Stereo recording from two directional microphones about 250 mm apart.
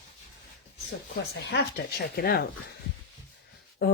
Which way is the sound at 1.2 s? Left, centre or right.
Left.